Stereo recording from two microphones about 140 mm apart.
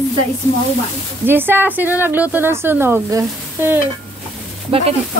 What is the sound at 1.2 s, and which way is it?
Speech, 15° right (ahead or behind).